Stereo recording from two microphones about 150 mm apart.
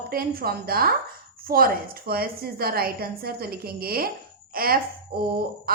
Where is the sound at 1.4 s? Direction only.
75° right (ahead or behind).